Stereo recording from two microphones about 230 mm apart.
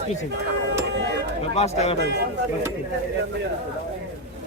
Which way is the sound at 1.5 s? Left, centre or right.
Left.